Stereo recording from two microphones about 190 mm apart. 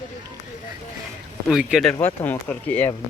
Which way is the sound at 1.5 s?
Centre (ahead or behind).